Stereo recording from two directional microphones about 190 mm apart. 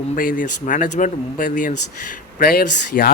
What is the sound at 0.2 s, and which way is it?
A man's voice, 45° left (ahead or behind).